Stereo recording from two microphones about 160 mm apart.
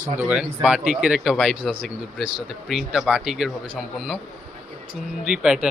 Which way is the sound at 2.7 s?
Centre (ahead or behind).